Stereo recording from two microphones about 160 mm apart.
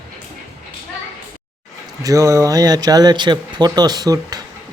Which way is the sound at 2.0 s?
20° right (ahead or behind).